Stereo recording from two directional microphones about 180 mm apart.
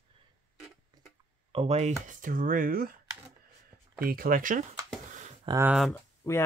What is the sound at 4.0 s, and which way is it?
Speech, 55° right (ahead or behind).